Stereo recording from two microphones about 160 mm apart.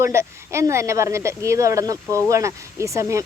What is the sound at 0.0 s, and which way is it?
Speech, 15° right (ahead or behind).